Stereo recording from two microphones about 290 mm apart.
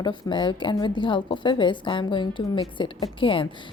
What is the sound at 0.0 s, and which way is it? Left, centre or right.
A woman's voice, centre.